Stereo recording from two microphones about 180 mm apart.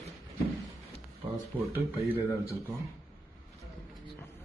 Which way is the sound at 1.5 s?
10° left (ahead or behind).